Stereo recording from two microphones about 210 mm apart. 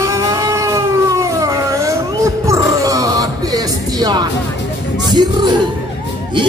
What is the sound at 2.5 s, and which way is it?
Music, 15° right (ahead or behind).